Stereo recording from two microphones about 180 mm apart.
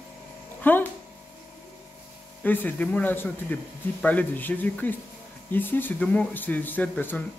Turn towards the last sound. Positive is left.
turn(degrees=10)  # may be behind; listen again after turning